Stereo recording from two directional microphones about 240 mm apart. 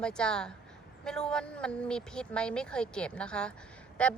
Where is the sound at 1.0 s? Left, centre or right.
Centre.